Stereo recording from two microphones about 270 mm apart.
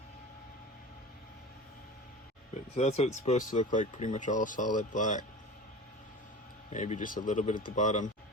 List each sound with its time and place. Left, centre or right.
2.7 s speech: left
6.7 s speech: left